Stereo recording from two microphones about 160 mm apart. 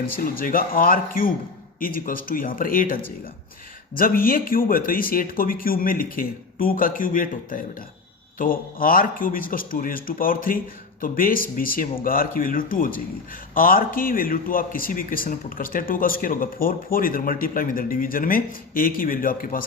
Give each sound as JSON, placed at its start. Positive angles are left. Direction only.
{"t": 0.2, "sound": "a man's voice", "side_deg": 65}